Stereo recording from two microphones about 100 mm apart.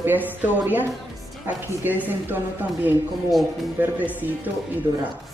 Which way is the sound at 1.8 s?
20° right (ahead or behind).